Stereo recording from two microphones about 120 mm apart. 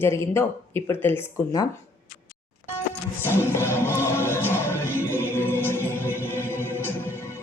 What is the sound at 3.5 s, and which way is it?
Music, 20° left (ahead or behind).